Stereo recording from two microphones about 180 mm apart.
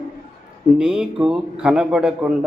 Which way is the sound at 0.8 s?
5° right (ahead or behind).